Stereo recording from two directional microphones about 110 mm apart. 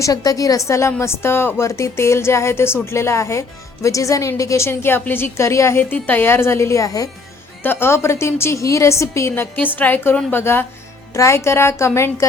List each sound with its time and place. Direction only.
0.0 s a woman's voice: 35° left (ahead or behind)
7.6 s a woman's voice: 20° left (ahead or behind)